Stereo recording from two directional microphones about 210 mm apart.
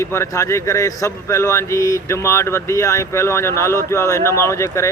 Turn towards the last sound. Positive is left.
turn(degrees=15)  # may be behind; listen again after turning